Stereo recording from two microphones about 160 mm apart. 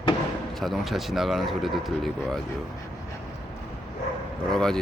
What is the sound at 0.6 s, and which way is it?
Speech, centre (ahead or behind).